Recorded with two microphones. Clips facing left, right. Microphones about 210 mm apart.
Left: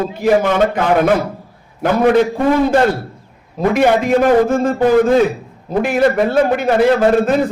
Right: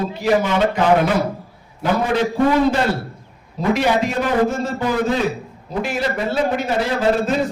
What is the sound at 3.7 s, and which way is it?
A man's voice, 50° left (ahead or behind).